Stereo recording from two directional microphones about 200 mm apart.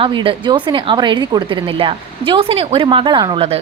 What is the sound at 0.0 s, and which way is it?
A woman's voice, 25° right (ahead or behind).